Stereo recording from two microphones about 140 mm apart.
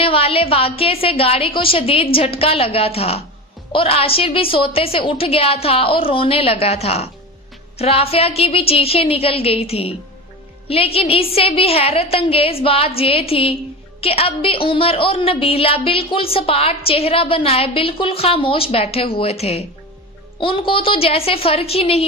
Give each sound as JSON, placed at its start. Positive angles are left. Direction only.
{"t": 0.0, "sound": "a woman's voice", "side_deg": 40}